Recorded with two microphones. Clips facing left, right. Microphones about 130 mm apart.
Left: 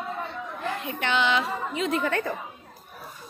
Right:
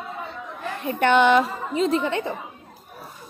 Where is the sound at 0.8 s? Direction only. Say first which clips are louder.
Right 10 dB; 45° right (ahead or behind).